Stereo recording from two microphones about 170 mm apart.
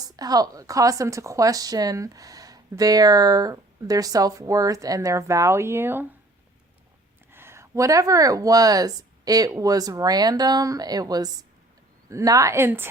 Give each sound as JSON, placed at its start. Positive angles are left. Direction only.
{"t": 0.0, "sound": "a woman's voice", "side_deg": -20}
{"t": 7.3, "sound": "a woman's voice", "side_deg": -15}